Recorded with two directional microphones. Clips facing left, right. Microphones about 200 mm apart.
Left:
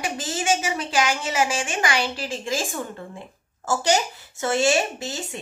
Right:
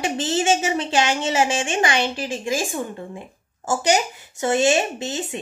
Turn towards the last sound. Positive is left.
turn(degrees=-20)  # may be behind; listen again after turning